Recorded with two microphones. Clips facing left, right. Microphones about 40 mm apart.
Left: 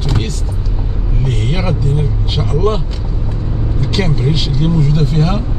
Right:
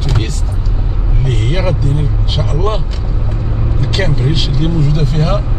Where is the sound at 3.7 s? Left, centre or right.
Centre.